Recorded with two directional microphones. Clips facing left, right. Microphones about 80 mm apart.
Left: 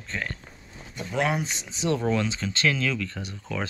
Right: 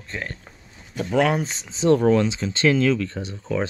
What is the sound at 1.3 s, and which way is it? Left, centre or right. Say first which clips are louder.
Speech: right 4 dB; right.